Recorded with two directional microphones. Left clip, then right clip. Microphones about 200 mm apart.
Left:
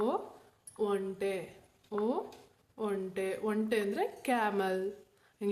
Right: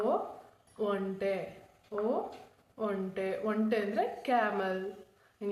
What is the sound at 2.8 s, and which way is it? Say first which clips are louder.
A woman's voice: right 1 dB; 35° left (ahead or behind).